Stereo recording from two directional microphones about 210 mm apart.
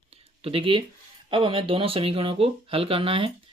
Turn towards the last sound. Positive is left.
turn(degrees=-25)  # may be behind; listen again after turning